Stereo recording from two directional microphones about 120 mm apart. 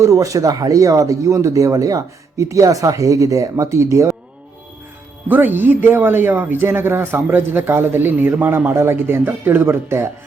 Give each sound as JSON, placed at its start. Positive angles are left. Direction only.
{"t": 0.0, "sound": "speech", "side_deg": -25}
{"t": 5.3, "sound": "speech", "side_deg": -15}